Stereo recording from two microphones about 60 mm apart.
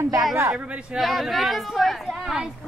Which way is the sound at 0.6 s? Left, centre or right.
Right.